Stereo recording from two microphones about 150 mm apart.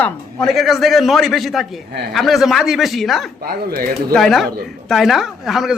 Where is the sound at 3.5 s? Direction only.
90° right.